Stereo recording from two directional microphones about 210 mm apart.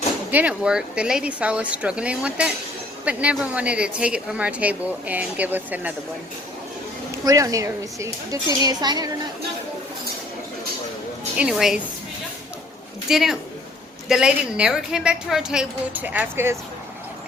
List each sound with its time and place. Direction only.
0.3 s a woman's voice: 5° right (ahead or behind)
7.3 s a woman's voice: 15° right (ahead or behind)
11.3 s a woman's voice: 5° right (ahead or behind)
13.1 s a woman's voice: centre (ahead or behind)